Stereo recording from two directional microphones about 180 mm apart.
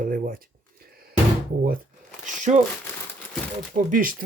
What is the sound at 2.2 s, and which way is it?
Crumpling, 40° right (ahead or behind).